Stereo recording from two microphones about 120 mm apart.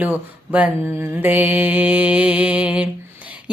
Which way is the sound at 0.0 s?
10° right (ahead or behind).